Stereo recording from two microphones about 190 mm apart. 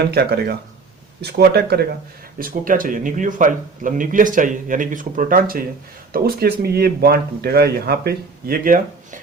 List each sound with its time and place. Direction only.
0.0 s speech: 55° right (ahead or behind)